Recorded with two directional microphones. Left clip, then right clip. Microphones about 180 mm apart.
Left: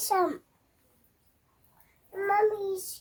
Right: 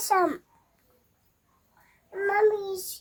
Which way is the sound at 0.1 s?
25° right (ahead or behind).